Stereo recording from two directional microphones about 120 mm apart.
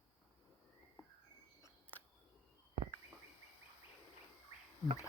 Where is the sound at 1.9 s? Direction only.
15° left (ahead or behind).